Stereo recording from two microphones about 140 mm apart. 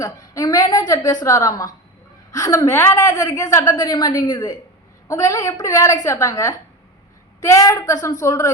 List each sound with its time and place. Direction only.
0.0 s a woman's voice: 25° left (ahead or behind)